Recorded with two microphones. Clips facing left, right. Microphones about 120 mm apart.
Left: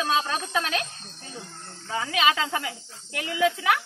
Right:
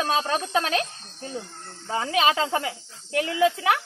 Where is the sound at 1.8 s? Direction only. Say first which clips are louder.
Right 2 dB; 30° right (ahead or behind).